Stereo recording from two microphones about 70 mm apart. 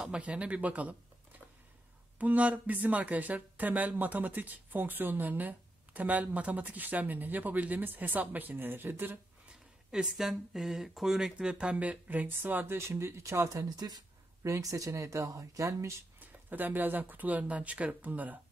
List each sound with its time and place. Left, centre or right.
0.0 s speech: centre
2.1 s speech: right
9.8 s speech: centre; by 13.7 s right
13.7 s speech: right
14.4 s speech: right
16.2 s speech: right